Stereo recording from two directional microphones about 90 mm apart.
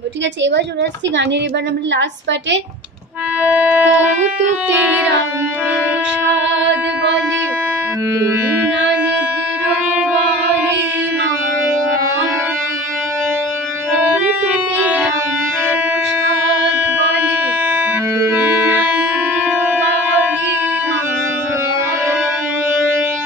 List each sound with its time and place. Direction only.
3.5 s music: 20° right (ahead or behind)
14.0 s organ: 15° right (ahead or behind)
18.2 s music: 25° right (ahead or behind)